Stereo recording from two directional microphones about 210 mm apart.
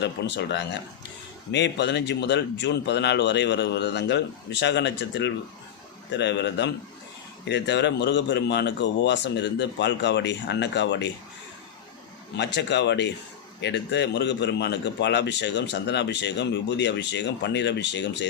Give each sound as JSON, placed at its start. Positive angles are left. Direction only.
{"t": 0.0, "sound": "a man's voice", "side_deg": 55}
{"t": 12.5, "sound": "a man's voice", "side_deg": 55}